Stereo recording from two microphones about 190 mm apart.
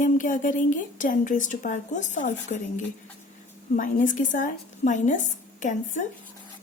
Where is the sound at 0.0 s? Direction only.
45° left (ahead or behind).